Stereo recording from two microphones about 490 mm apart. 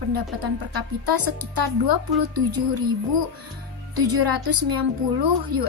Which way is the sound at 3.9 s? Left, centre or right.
Right.